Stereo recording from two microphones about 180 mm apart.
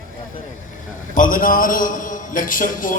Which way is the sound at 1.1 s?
50° left (ahead or behind).